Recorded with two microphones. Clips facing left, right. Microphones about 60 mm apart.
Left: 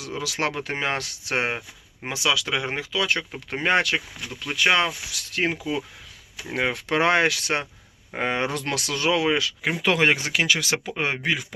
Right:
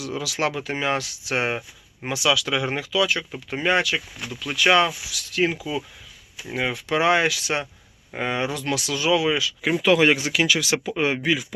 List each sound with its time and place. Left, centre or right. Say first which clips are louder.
0.0 s speech: right 2 dB; left
3.0 s speech: right 2 dB; left
4.5 s speech: right 3 dB; left
4.9 s speech: even; left